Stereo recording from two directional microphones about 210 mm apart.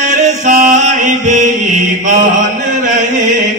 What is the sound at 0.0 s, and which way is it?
Music, 35° right (ahead or behind).